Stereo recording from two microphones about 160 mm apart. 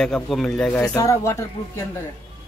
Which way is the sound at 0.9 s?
20° left (ahead or behind).